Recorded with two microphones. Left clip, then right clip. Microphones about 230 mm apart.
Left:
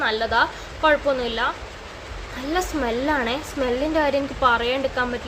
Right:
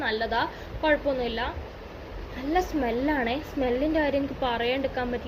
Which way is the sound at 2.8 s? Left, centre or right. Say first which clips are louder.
Left 4 dB; centre.